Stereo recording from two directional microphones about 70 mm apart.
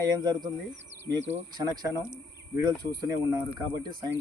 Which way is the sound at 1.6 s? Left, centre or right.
Right.